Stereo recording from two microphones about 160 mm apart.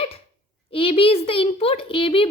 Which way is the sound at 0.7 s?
35° left (ahead or behind).